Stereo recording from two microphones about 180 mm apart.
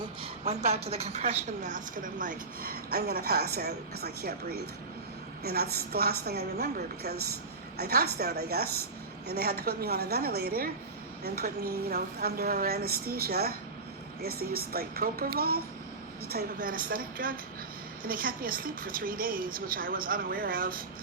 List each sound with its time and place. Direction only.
0.4 s a woman's voice: 35° right (ahead or behind); by 4.4 s 60° right (ahead or behind)
5.4 s a woman's voice: 60° right (ahead or behind)